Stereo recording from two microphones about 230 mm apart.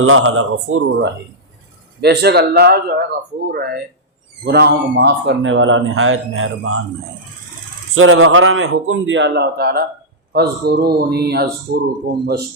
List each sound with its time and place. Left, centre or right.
0.0 s speech: right
2.0 s a man's voice: right
7.9 s a man's voice: right